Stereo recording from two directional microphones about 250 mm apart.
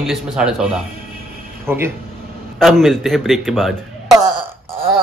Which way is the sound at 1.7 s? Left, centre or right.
Centre.